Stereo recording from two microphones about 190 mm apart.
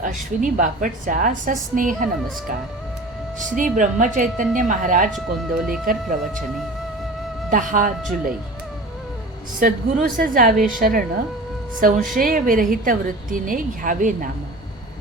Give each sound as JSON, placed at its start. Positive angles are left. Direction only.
{"t": 0.0, "sound": "a woman's voice", "side_deg": -40}
{"t": 3.6, "sound": "a woman's voice", "side_deg": -45}
{"t": 5.1, "sound": "speech", "side_deg": 0}
{"t": 5.8, "sound": "a woman's voice", "side_deg": -45}
{"t": 7.5, "sound": "a woman's voice", "side_deg": -45}
{"t": 9.6, "sound": "a woman's voice", "side_deg": -45}